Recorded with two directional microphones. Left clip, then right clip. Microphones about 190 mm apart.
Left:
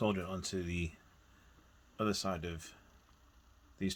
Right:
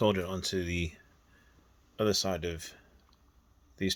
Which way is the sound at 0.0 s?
45° right (ahead or behind).